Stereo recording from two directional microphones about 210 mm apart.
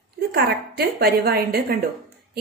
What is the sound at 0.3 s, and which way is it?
A woman's voice, 50° right (ahead or behind).